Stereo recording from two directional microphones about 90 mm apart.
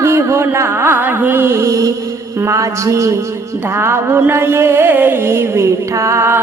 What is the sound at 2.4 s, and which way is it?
Speech, 35° right (ahead or behind).